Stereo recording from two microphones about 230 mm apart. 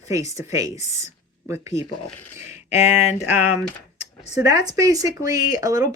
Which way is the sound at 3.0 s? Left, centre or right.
Left.